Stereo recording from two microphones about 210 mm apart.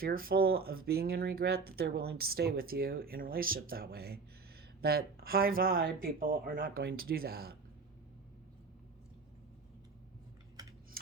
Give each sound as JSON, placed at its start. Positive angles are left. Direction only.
{"t": 0.0, "sound": "speech", "side_deg": -45}